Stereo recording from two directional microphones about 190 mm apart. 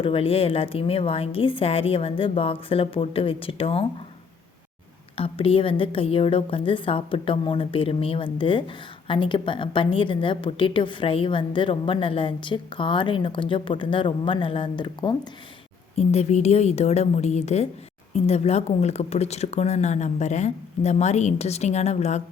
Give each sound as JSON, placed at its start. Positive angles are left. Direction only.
{"t": 0.0, "sound": "a woman's voice", "side_deg": 30}
{"t": 5.1, "sound": "a woman's voice", "side_deg": 30}